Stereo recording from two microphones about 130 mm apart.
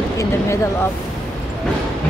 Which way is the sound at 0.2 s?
20° left (ahead or behind).